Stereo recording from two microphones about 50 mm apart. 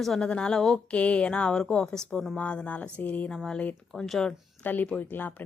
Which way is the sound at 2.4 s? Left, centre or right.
Left.